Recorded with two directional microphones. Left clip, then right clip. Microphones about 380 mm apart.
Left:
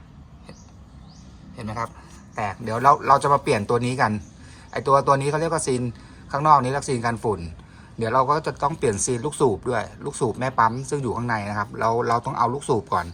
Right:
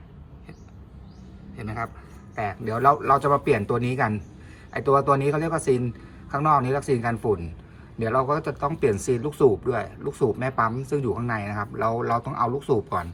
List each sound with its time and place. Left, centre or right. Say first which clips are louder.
1.5 s speech: left 2 dB; centre